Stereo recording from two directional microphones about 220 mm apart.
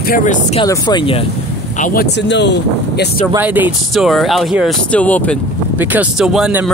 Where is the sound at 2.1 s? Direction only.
50° left (ahead or behind).